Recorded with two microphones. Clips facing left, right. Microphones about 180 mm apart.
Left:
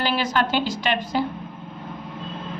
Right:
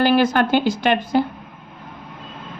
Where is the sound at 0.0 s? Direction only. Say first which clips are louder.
Right 7 dB; 50° right (ahead or behind).